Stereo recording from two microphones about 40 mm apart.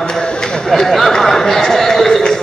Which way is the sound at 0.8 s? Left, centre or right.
Centre.